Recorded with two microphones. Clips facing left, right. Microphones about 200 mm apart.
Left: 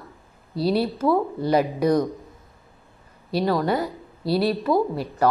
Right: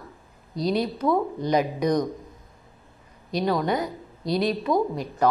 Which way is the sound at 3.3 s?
5° left (ahead or behind).